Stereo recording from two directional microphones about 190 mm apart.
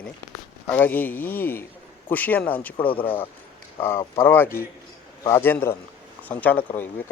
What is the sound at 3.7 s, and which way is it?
Speech, 15° left (ahead or behind).